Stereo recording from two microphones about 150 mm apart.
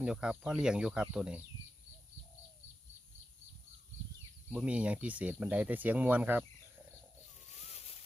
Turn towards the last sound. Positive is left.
turn(degrees=-10)  # may be behind; listen again after turning